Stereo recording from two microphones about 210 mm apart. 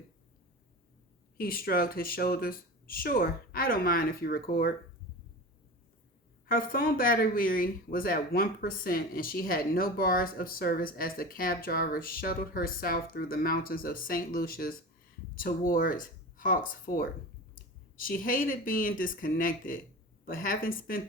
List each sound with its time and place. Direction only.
1.4 s speech: 45° left (ahead or behind)
6.5 s speech: 40° left (ahead or behind)